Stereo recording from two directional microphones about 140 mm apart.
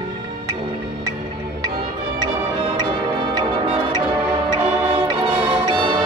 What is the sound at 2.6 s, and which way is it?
Music, 35° right (ahead or behind).